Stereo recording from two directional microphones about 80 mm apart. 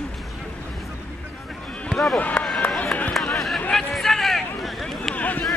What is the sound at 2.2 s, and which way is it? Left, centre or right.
Run, centre.